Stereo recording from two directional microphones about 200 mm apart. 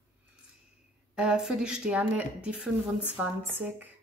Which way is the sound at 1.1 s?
5° right (ahead or behind).